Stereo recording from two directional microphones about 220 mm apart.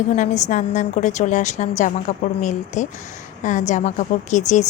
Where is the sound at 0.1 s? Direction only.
30° left (ahead or behind).